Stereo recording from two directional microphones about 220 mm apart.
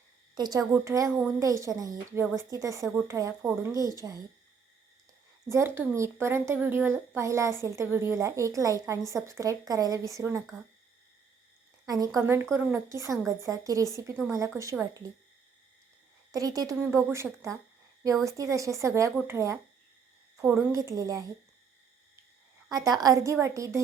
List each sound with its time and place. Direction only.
0.3 s a woman's voice: 20° right (ahead or behind)
5.5 s a woman's voice: 10° right (ahead or behind)
11.9 s a woman's voice: 15° right (ahead or behind)
16.3 s a woman's voice: 15° right (ahead or behind)
18.3 s a woman's voice: 15° right (ahead or behind)
20.3 s a sound: centre (ahead or behind)
20.7 s a woman's voice: 15° right (ahead or behind)
22.7 s a woman's voice: 15° right (ahead or behind)